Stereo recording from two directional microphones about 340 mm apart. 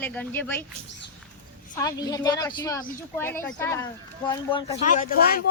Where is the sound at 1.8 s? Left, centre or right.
Centre.